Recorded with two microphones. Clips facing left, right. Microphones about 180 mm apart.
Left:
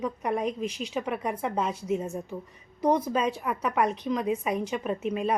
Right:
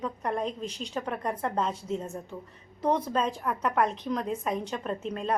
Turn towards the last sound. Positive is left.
turn(degrees=10)  # may be behind; listen again after turning